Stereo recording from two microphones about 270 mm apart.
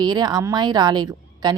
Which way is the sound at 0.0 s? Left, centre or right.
Centre.